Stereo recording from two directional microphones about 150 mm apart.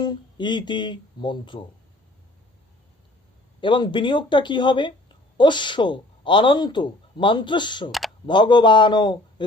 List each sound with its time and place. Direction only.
0.0 s speech: 30° left (ahead or behind)
3.6 s speech: 35° left (ahead or behind)